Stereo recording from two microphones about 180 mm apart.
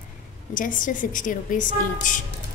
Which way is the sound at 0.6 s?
45° left (ahead or behind).